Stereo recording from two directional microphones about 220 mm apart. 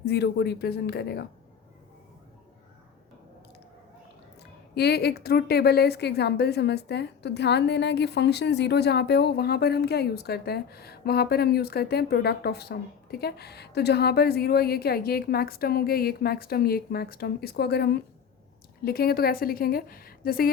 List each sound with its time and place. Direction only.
0.0 s a woman's voice: 50° left (ahead or behind)
4.7 s a woman's voice: 45° left (ahead or behind)